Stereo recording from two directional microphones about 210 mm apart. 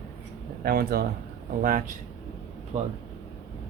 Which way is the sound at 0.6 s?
45° right (ahead or behind).